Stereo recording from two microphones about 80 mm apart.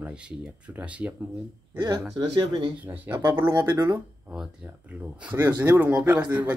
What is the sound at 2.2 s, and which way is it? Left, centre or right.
Speech, right.